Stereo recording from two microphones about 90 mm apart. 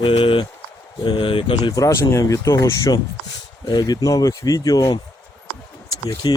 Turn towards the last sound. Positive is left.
turn(degrees=55)  # may be behind; listen again after turning